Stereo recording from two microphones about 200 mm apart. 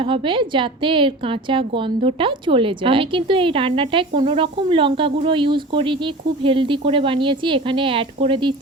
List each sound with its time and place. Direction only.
0.0 s a woman's voice: 25° right (ahead or behind)